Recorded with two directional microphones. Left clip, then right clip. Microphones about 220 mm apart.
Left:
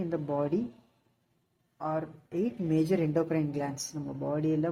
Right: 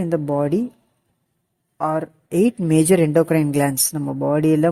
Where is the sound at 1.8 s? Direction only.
45° right (ahead or behind).